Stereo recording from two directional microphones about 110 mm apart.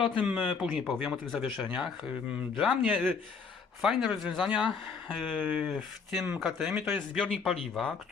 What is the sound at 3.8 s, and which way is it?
Speech, 5° right (ahead or behind).